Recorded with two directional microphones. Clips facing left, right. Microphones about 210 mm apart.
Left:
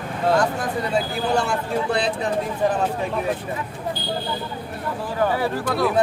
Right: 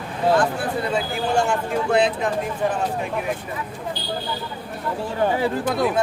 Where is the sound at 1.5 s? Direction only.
35° left (ahead or behind).